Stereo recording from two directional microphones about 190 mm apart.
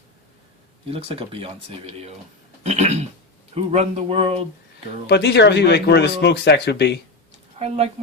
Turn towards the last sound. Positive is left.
turn(degrees=-35)  # may be behind; listen again after turning